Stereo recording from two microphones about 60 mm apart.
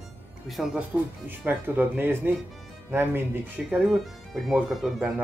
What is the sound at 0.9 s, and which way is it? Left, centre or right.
Speech, right.